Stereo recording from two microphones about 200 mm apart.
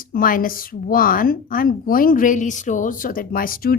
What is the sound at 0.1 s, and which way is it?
A woman's voice, 45° left (ahead or behind).